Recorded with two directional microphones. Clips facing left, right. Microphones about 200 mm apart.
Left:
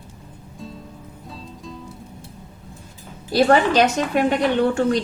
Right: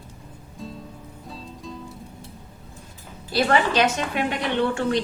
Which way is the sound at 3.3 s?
40° left (ahead or behind).